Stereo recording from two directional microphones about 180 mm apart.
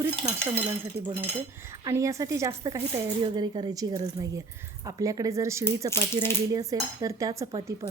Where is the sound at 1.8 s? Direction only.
15° right (ahead or behind).